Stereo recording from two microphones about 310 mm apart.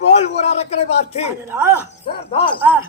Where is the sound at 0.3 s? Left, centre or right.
Left.